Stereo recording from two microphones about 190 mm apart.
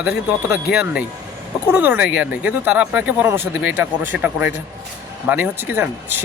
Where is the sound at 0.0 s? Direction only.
5° right (ahead or behind).